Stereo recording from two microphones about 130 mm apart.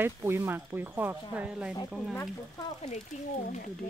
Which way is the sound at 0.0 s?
15° right (ahead or behind).